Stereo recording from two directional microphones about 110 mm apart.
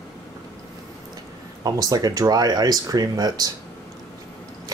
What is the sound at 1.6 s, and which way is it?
Speech, 35° right (ahead or behind).